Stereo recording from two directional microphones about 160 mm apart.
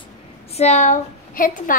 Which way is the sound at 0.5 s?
45° left (ahead or behind).